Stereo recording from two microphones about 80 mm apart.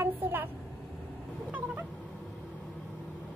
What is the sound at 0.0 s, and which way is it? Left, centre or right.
Vehicle, right.